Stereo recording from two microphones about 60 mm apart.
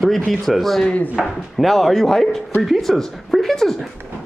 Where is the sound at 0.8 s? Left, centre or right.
Left.